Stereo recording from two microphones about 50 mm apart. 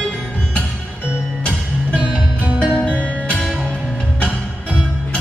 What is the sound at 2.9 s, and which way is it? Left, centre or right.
Music, left.